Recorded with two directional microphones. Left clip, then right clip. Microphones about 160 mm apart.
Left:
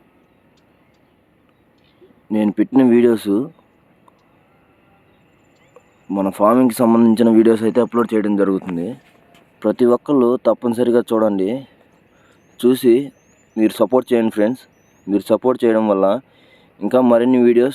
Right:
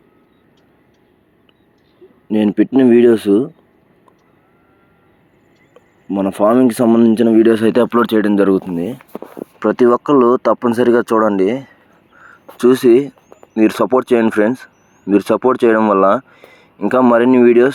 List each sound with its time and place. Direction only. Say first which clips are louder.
2.3 s speech: right 3 dB; 10° right (ahead or behind)
6.1 s speech: right 1 dB; centre (ahead or behind)
7.5 s speech: right 3 dB; 15° right (ahead or behind)
7.8 s speech: right 4 dB; 30° right (ahead or behind)
8.5 s speech: right 5 dB; 10° right (ahead or behind)